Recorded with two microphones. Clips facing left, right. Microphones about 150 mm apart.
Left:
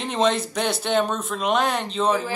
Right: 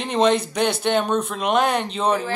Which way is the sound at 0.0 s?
Centre (ahead or behind).